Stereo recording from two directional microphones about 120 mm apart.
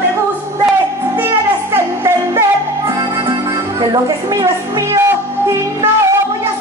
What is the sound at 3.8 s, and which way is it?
A woman's voice, 35° right (ahead or behind).